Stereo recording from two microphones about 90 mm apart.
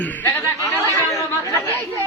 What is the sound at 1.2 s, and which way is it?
Chatter, 35° left (ahead or behind).